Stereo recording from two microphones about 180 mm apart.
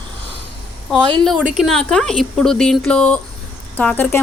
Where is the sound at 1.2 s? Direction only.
Centre (ahead or behind).